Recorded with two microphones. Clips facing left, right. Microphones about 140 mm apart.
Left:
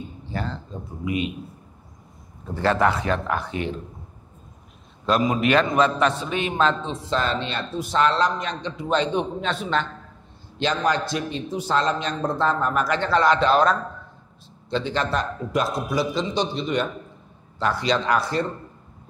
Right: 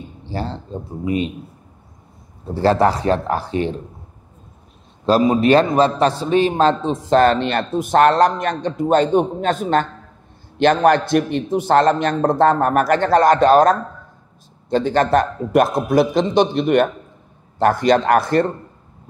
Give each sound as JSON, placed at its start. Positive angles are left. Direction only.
{"t": 0.2, "sound": "speech", "side_deg": -30}
{"t": 2.4, "sound": "speech", "side_deg": -35}
{"t": 5.0, "sound": "a man's voice", "side_deg": -30}
{"t": 10.6, "sound": "a man's voice", "side_deg": -55}